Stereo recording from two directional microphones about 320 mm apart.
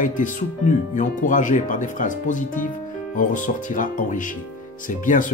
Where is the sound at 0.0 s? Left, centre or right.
Left.